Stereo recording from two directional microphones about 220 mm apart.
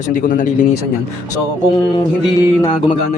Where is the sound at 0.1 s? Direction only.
35° left (ahead or behind).